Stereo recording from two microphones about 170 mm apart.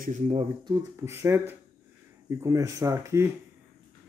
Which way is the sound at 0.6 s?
20° right (ahead or behind).